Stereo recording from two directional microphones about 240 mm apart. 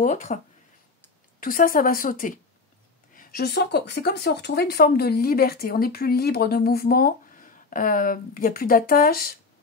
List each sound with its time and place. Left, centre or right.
0.0 s speech: left
1.4 s speech: left